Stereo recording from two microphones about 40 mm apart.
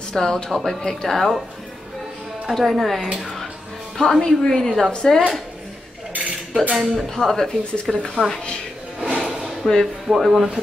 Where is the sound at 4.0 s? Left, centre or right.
Centre.